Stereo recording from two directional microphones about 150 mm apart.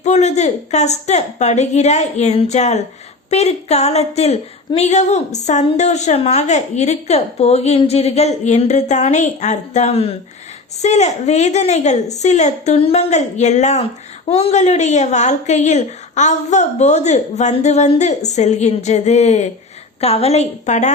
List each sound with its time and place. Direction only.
0.0 s speech: 50° left (ahead or behind)